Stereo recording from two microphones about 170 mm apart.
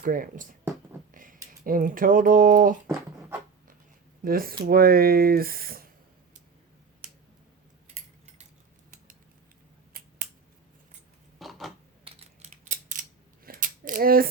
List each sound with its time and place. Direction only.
0.0 s speech: 55° right (ahead or behind)
2.8 s dog: 15° right (ahead or behind)
4.2 s speech: 60° right (ahead or behind)
9.9 s finger snapping: 60° right (ahead or behind)
11.3 s a sound: centre (ahead or behind)
12.0 s scissors: 40° right (ahead or behind); by 14.3 s 60° right (ahead or behind)